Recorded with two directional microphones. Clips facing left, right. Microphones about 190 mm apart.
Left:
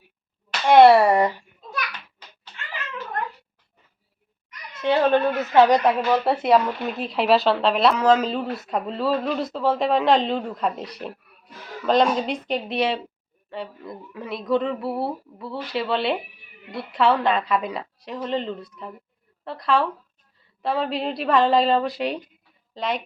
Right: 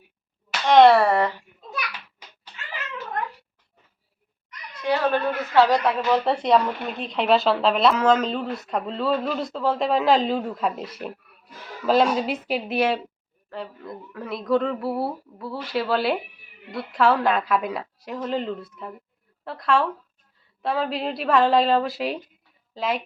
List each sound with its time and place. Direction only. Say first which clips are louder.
0.6 s speech: left 2 dB; 10° left (ahead or behind)
4.7 s speech: left 4 dB; 25° left (ahead or behind)
6.2 s speech: left 1 dB; 5° left (ahead or behind)